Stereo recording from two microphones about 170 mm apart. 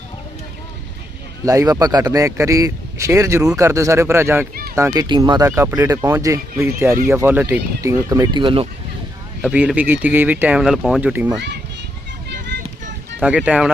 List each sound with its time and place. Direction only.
1.5 s speech: 20° right (ahead or behind)
5.0 s speech: 25° right (ahead or behind)
9.4 s speech: 5° right (ahead or behind)
11.1 s speech: 10° right (ahead or behind)
11.3 s a child's voice: 80° right
13.2 s speech: 5° right (ahead or behind)